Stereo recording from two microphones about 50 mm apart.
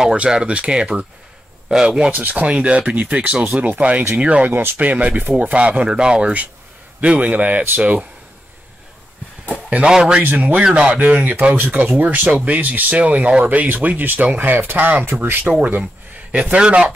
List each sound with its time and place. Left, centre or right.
0.1 s speech: centre
4.5 s speech: right
4.7 s speech: right
7.0 s speech: right
9.8 s speech: centre
10.2 s speech: right
15.8 s speech: right